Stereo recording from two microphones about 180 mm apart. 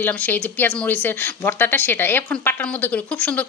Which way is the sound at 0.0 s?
10° left (ahead or behind).